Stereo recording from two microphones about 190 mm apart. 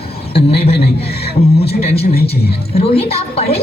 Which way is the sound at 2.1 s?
55° left (ahead or behind).